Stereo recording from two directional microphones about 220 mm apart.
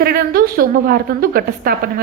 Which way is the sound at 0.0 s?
45° right (ahead or behind).